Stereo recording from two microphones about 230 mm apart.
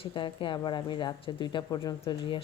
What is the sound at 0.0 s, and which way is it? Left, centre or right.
Speech, left.